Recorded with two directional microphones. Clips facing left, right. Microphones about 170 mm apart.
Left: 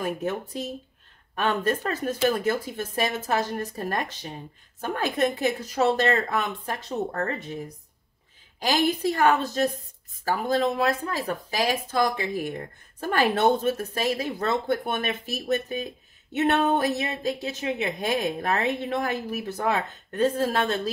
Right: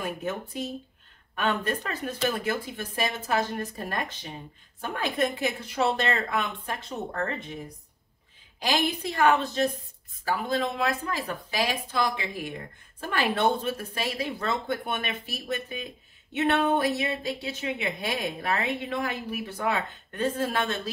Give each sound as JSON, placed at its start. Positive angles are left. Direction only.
{"t": 1.3, "sound": "a woman's voice", "side_deg": 40}
{"t": 8.5, "sound": "a woman's voice", "side_deg": 45}